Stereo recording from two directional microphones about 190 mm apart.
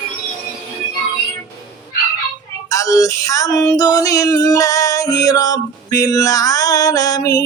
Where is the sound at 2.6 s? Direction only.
15° left (ahead or behind).